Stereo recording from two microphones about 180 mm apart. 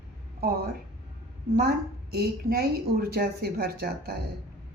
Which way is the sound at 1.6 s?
60° right (ahead or behind).